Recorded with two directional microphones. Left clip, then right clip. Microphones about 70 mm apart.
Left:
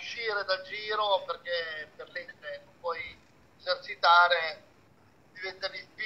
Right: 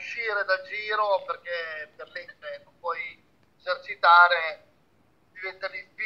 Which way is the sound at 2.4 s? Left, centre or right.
Right.